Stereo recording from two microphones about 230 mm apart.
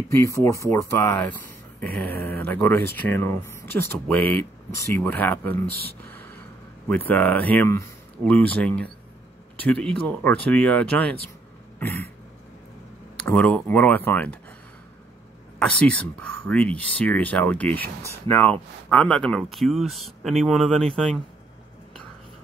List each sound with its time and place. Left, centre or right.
0.1 s speech: centre
5.8 s speech: right
7.1 s speech: centre
13.3 s speech: centre
15.6 s speech: centre